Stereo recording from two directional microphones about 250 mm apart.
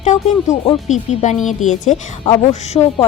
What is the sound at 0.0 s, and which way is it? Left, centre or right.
A woman's voice, left.